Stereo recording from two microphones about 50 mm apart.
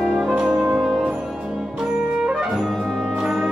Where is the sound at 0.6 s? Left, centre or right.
Centre.